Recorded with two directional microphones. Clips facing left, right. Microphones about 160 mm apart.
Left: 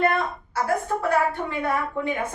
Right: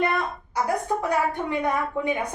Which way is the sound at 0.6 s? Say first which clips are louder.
Even; 15° right (ahead or behind).